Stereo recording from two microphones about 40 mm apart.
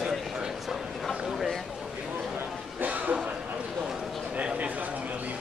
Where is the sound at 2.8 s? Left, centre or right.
Right.